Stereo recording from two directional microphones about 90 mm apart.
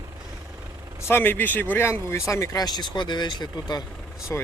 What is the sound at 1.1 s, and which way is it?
Speech, 25° left (ahead or behind).